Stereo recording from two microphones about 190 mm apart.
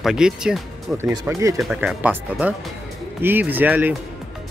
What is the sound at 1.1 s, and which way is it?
Speech, 15° right (ahead or behind).